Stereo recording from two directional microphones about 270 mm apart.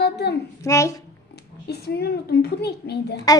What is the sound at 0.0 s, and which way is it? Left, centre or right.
Speech, left.